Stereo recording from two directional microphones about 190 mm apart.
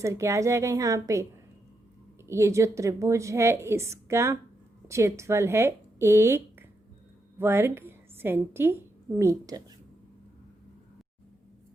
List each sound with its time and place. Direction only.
0.0 s a woman's voice: 15° right (ahead or behind)